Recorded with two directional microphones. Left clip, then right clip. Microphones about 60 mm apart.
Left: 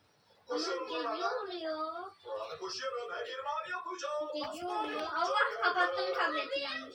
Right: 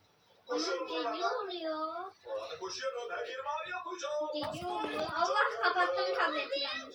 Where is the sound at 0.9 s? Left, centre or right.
Centre.